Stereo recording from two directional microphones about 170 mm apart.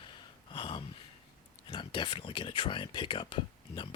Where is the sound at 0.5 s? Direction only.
30° left (ahead or behind).